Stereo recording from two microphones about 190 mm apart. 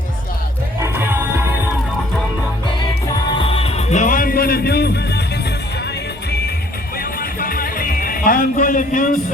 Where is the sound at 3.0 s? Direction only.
20° left (ahead or behind); by 6.5 s 55° left (ahead or behind).